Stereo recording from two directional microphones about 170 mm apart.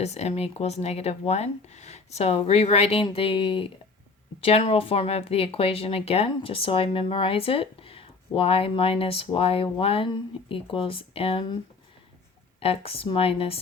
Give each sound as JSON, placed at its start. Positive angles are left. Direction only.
{"t": 0.0, "sound": "speech", "side_deg": 40}
{"t": 12.5, "sound": "speech", "side_deg": 35}